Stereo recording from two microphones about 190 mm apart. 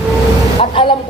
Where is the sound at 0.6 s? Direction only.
25° left (ahead or behind).